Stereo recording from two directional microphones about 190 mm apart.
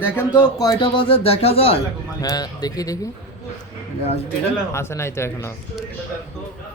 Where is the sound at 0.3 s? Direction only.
20° left (ahead or behind).